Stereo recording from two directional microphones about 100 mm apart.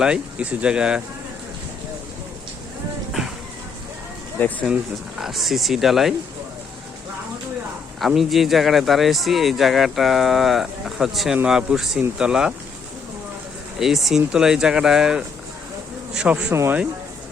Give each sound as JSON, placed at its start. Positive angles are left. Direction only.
{"t": 0.0, "sound": "speech", "side_deg": -10}
{"t": 4.7, "sound": "speech", "side_deg": -5}
{"t": 7.9, "sound": "speech", "side_deg": 0}
{"t": 13.7, "sound": "speech", "side_deg": -5}
{"t": 16.5, "sound": "speech", "side_deg": -25}